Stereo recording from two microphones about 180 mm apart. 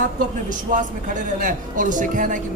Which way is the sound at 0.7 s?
45° right (ahead or behind).